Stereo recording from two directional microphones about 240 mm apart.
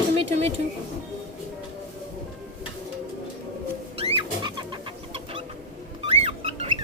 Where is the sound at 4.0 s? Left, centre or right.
Right.